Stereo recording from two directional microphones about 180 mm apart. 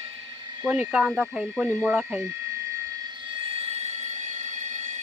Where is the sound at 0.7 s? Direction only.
10° right (ahead or behind).